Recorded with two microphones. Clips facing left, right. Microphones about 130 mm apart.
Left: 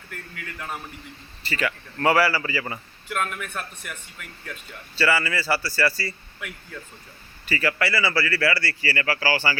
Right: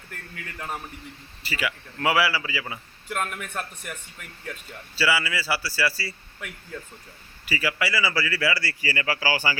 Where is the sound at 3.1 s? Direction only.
35° right (ahead or behind).